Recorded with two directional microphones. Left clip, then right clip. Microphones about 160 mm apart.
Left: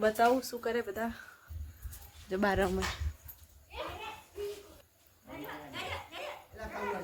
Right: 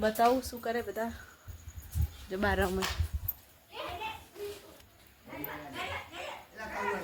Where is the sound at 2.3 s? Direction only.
35° left (ahead or behind).